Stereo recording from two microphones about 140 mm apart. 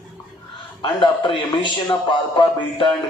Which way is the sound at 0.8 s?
35° left (ahead or behind).